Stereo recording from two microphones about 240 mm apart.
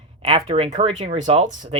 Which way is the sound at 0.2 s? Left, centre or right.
Right.